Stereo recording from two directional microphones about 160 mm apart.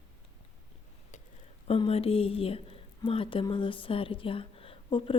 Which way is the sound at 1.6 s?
35° left (ahead or behind).